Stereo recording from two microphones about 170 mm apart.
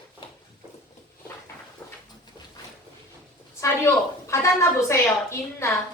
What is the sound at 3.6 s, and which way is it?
A woman's voice, 15° left (ahead or behind).